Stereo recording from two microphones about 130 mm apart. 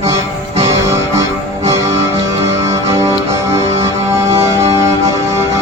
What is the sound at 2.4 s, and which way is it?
Music, 25° right (ahead or behind).